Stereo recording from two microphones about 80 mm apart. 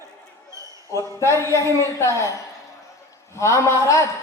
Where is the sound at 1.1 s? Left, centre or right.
Left.